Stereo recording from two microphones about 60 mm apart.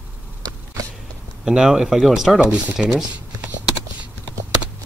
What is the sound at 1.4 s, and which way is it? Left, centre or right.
Speech, centre.